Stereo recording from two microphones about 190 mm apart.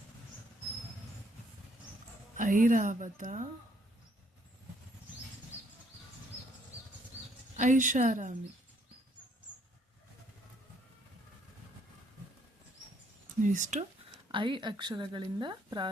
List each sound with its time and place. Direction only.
2.4 s a woman's voice: 45° right (ahead or behind)
7.5 s speech: 40° right (ahead or behind)
13.4 s speech: 40° right (ahead or behind)
14.3 s speech: 25° right (ahead or behind)